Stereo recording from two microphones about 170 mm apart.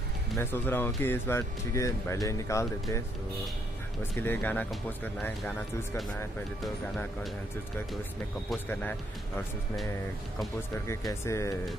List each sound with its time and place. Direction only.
0.4 s speech: 10° left (ahead or behind)
4.0 s speech: 10° left (ahead or behind)
10.7 s speech: 15° left (ahead or behind)